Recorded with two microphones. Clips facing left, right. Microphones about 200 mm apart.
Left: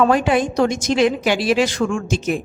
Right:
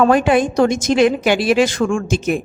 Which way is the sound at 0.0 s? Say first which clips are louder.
Right 3 dB; 55° right (ahead or behind).